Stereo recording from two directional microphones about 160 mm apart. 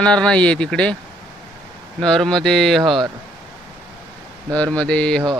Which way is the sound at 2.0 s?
5° left (ahead or behind).